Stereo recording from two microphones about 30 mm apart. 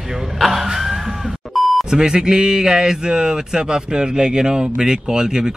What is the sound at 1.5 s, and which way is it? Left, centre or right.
Beep, centre.